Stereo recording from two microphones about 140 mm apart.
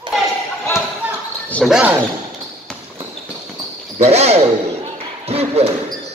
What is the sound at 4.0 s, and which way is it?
Speech, 50° right (ahead or behind).